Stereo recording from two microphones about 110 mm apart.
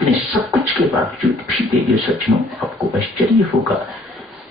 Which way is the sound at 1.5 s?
Centre (ahead or behind).